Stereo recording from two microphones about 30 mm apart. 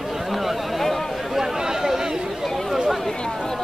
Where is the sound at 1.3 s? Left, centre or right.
Centre.